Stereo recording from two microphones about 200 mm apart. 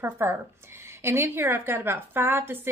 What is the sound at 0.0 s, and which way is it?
Speech, 10° right (ahead or behind).